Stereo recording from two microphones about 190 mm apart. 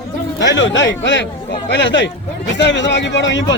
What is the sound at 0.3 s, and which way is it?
A man's voice, 70° left (ahead or behind).